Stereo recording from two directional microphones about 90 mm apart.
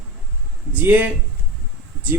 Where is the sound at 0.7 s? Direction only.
20° right (ahead or behind).